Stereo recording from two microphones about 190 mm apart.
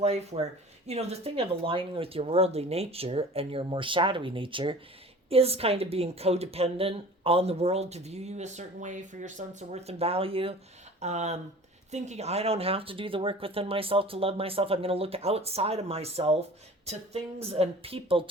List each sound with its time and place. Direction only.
0.0 s a woman's voice: 35° right (ahead or behind)